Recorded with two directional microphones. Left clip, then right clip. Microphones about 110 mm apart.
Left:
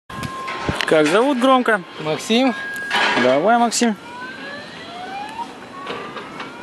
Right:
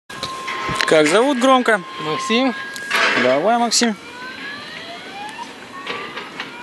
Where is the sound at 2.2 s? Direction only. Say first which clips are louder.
Left 1 dB; 15° left (ahead or behind).